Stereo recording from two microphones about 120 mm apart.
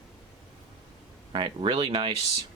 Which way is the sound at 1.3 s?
45° right (ahead or behind).